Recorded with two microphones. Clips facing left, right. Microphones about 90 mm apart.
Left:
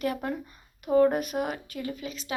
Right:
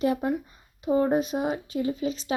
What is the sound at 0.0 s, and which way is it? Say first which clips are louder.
Speech: right 5 dB; 20° right (ahead or behind).